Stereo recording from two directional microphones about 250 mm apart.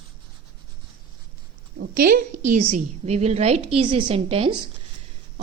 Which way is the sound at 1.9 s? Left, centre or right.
Right.